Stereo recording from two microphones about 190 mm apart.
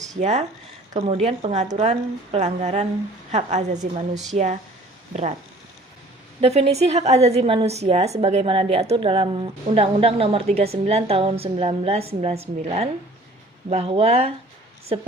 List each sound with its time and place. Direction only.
0.2 s a woman's voice: 35° right (ahead or behind)
6.4 s a woman's voice: 35° right (ahead or behind)